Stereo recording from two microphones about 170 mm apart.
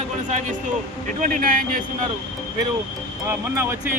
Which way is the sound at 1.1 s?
50° right (ahead or behind).